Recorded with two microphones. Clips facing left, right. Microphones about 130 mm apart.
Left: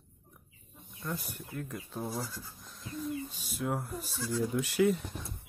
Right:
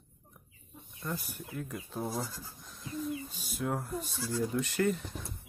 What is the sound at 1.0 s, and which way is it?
Speech, centre (ahead or behind).